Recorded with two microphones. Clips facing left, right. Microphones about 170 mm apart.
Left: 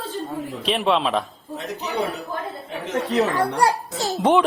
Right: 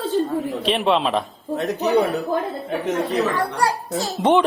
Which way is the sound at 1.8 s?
40° right (ahead or behind).